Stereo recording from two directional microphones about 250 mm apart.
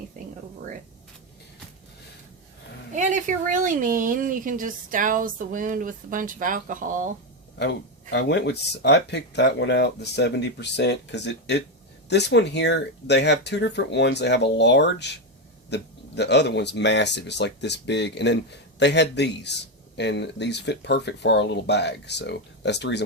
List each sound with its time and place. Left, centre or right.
2.9 s speech: right
7.6 s speech: left